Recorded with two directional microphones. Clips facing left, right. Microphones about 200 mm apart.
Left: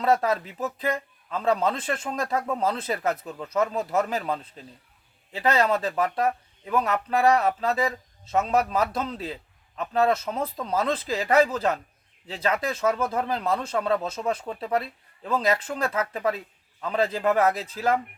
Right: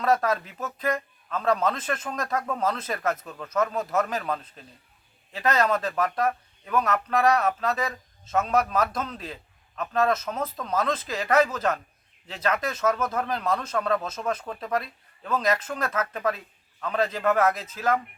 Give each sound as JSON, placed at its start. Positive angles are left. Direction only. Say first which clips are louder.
{"t": 0.0, "sound": "speech", "louder": "left 1 dB", "side_deg": 30}
{"t": 5.4, "sound": "a man's voice", "louder": "left 1 dB", "side_deg": 30}